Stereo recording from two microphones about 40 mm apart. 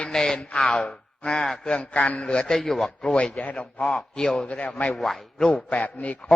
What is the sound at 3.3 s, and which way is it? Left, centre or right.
A man's voice, left.